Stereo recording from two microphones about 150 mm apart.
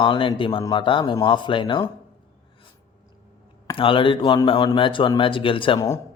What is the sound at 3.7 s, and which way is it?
A man's voice, 35° left (ahead or behind).